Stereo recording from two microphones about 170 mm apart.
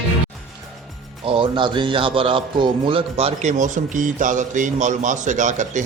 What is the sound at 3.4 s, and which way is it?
A man's voice, 45° right (ahead or behind).